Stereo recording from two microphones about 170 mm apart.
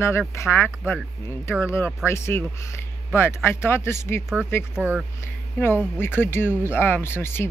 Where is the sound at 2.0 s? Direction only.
15° left (ahead or behind).